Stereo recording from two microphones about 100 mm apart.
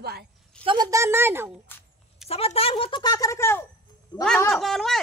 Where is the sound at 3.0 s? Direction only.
35° left (ahead or behind).